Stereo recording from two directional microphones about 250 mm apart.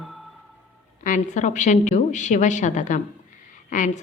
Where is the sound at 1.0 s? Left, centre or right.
Left.